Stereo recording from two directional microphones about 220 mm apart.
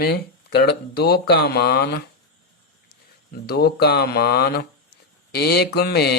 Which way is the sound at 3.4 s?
45° left (ahead or behind).